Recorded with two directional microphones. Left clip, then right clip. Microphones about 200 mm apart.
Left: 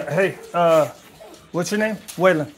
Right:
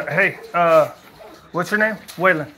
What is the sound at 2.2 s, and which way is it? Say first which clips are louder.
Speech: even; 55° left (ahead or behind).